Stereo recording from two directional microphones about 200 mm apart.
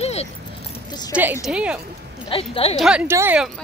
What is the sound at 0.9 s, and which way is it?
Speech, 20° left (ahead or behind).